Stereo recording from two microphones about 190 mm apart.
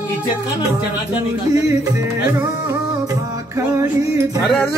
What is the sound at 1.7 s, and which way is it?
Music, 15° right (ahead or behind).